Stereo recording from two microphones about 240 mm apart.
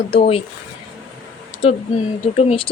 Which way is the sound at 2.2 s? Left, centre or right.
Left.